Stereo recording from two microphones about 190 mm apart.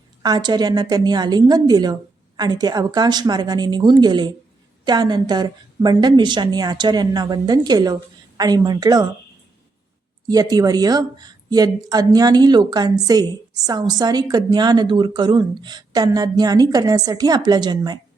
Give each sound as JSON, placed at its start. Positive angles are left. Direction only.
{"t": 0.2, "sound": "speech", "side_deg": -20}
{"t": 10.2, "sound": "speech", "side_deg": -20}